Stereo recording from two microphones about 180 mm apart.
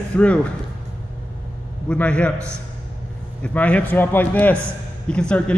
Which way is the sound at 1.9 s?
5° left (ahead or behind).